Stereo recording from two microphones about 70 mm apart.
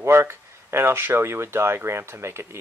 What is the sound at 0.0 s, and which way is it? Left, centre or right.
Speech, right.